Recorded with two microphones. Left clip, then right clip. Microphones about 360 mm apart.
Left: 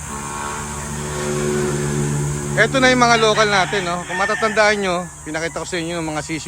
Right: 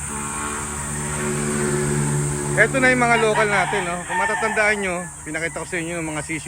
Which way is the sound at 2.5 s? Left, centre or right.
Centre.